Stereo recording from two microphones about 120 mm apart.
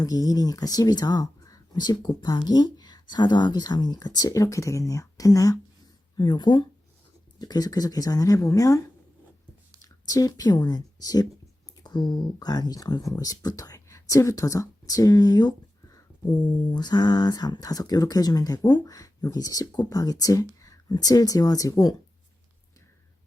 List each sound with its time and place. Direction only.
0.0 s speech: 30° left (ahead or behind)
9.8 s speech: 30° left (ahead or behind)